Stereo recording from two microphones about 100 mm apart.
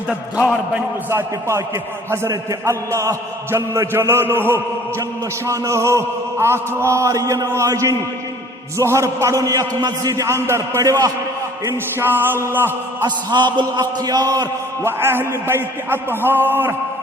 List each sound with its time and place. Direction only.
1.1 s a man's voice: 30° right (ahead or behind)
13.1 s a man's voice: 50° right (ahead or behind)
14.8 s a man's voice: 25° right (ahead or behind)